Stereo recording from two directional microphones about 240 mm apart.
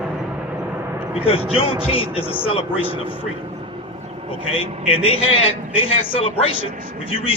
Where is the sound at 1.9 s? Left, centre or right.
Left.